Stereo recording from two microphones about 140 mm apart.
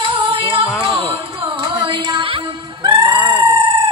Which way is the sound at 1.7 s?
35° right (ahead or behind).